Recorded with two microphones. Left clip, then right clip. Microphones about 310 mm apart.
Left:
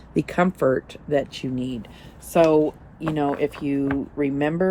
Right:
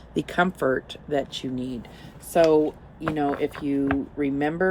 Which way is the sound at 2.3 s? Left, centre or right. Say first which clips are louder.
Left 1 dB; left.